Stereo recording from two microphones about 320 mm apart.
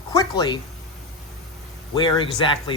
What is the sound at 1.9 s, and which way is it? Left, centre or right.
Speech, centre.